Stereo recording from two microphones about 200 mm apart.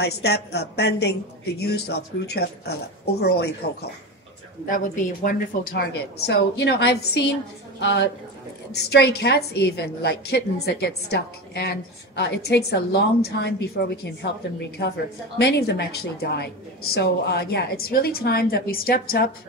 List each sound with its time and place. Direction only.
0.0 s a woman's voice: 55° left (ahead or behind)
4.6 s a woman's voice: 40° left (ahead or behind)